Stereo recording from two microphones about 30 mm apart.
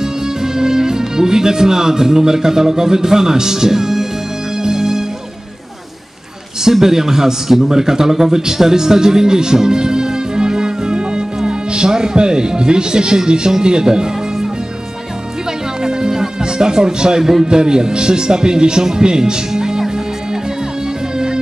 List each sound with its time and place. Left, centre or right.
0.0 s speech: centre
4.6 s music: centre
6.7 s a man's voice: centre
15.8 s music: right
17.5 s speech: right